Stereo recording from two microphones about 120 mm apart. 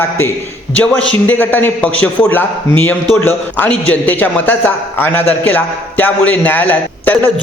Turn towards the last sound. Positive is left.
turn(degrees=15)  # may be behind; listen again after turning